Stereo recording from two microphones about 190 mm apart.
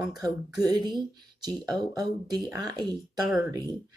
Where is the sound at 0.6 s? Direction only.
20° right (ahead or behind).